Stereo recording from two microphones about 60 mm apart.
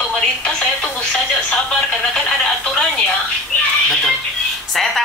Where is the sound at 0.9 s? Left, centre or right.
Centre.